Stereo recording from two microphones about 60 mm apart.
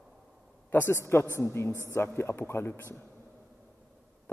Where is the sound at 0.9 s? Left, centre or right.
Left.